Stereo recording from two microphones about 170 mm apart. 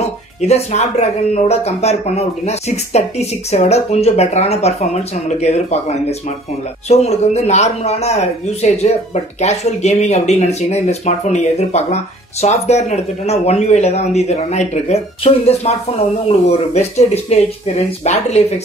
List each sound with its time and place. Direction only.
0.0 s speech: 40° left (ahead or behind)